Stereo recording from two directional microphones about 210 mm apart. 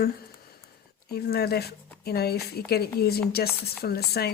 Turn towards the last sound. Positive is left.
turn(degrees=50)  # may be behind; listen again after turning